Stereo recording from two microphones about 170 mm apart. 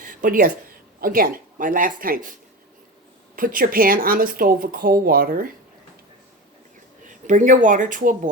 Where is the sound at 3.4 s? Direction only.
55° right (ahead or behind).